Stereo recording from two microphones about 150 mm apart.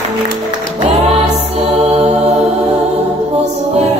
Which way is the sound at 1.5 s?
45° right (ahead or behind).